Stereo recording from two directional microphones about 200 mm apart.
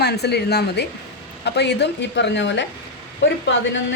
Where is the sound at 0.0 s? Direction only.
55° left (ahead or behind).